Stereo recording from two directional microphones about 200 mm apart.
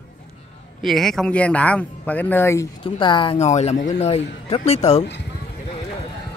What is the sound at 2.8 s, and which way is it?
Speech, 25° left (ahead or behind).